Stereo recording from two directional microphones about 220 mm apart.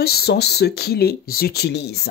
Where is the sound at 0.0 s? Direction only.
45° left (ahead or behind).